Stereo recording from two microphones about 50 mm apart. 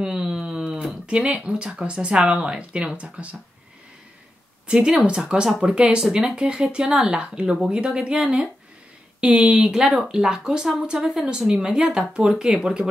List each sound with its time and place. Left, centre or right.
0.0 s a sound: centre
1.0 s speech: right
4.8 s speech: centre
11.2 s speech: centre